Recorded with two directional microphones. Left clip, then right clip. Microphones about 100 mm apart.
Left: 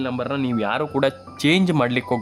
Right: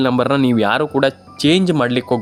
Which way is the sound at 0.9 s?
20° right (ahead or behind).